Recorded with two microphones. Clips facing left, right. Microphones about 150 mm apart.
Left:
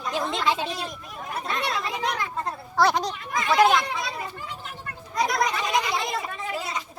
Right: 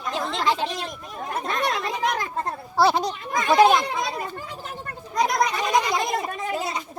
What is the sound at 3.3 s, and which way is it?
Speech, 35° right (ahead or behind).